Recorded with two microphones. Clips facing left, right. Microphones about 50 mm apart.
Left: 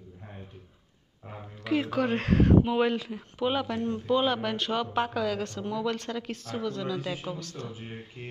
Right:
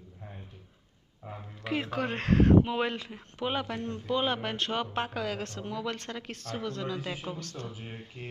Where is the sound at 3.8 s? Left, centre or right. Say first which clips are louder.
Left 6 dB; left.